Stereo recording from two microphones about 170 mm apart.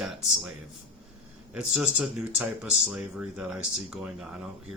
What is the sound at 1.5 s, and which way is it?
Speech, 5° right (ahead or behind).